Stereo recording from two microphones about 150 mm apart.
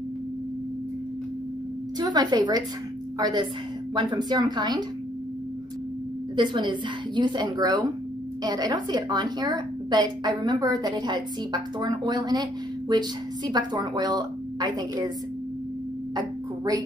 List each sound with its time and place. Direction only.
2.0 s a woman's voice: 25° right (ahead or behind)
6.3 s a woman's voice: 30° right (ahead or behind)
16.2 s a sound: 25° right (ahead or behind)